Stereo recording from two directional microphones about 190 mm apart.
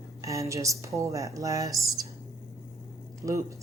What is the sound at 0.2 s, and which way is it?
Speech, 15° right (ahead or behind).